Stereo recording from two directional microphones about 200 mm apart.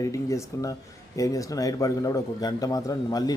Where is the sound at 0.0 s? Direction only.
15° left (ahead or behind).